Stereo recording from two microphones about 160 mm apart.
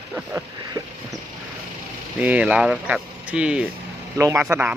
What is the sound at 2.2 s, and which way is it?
A man's voice, 10° right (ahead or behind).